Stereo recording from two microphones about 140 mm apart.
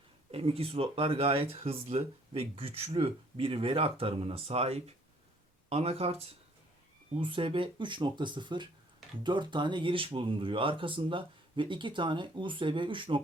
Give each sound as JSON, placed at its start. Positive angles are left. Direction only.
{"t": 0.3, "sound": "speech", "side_deg": -45}
{"t": 7.2, "sound": "speech", "side_deg": -35}